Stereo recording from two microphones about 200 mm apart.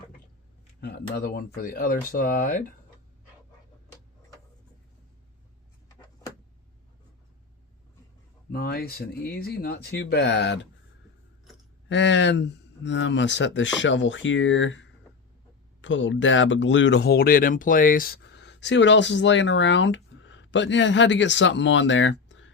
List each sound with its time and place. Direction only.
0.8 s speech: 55° left (ahead or behind)
8.5 s speech: 50° left (ahead or behind)
11.9 s speech: 65° left (ahead or behind); by 18.2 s 45° left (ahead or behind)
18.2 s speech: 60° left (ahead or behind)